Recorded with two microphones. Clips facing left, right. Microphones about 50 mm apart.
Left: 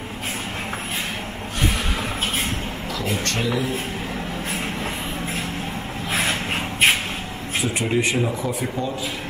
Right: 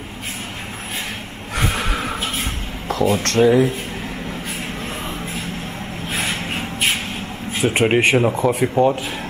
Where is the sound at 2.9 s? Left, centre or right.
Right.